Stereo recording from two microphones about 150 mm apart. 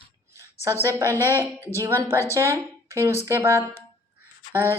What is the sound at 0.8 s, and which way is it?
A woman's voice, 20° right (ahead or behind).